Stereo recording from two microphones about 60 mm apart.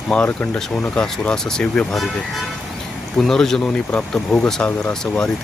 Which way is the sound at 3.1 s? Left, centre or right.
Centre.